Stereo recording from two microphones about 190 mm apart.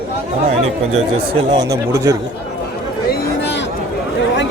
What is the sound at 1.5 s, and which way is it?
Speech, 15° right (ahead or behind).